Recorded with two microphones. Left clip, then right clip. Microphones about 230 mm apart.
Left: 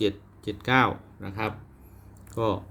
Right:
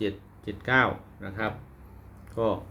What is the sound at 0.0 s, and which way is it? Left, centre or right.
Speech, left.